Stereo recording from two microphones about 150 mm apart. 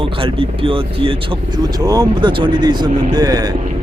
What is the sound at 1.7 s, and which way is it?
Speech, 25° right (ahead or behind).